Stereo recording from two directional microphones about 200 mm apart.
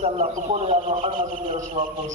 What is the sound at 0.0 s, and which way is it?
A man's voice, 35° right (ahead or behind).